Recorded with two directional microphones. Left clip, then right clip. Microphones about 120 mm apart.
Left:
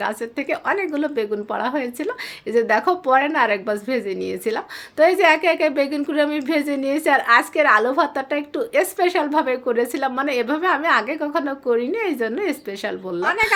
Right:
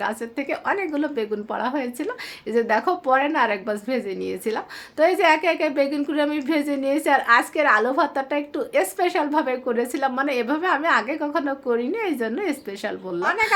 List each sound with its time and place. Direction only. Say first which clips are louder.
0.0 s a woman's voice: left 2 dB; 25° left (ahead or behind)